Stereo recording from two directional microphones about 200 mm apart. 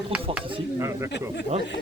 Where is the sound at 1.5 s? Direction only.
35° right (ahead or behind).